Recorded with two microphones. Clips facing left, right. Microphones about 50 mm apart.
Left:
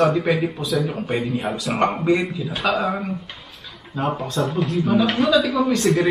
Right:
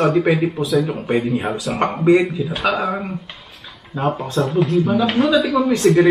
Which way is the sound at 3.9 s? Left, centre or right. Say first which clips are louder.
Right 3 dB; right.